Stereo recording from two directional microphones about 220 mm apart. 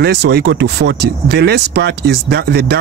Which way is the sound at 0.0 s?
50° right (ahead or behind).